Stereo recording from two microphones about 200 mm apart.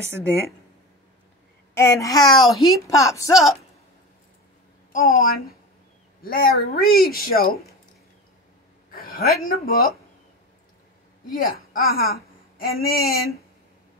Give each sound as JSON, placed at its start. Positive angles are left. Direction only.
{"t": 1.8, "sound": "speech", "side_deg": 15}
{"t": 2.2, "sound": "speech", "side_deg": 0}
{"t": 2.9, "sound": "speech", "side_deg": 15}
{"t": 4.9, "sound": "speech", "side_deg": 50}
{"t": 8.9, "sound": "a woman's voice", "side_deg": 50}
{"t": 11.2, "sound": "a woman's voice", "side_deg": 45}